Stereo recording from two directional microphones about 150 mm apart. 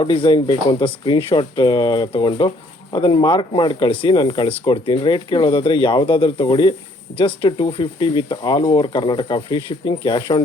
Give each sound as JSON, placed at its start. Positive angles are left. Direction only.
{"t": 0.0, "sound": "speech", "side_deg": 35}